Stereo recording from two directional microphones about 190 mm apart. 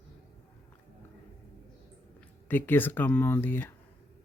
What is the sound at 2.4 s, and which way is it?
Speech, 10° left (ahead or behind).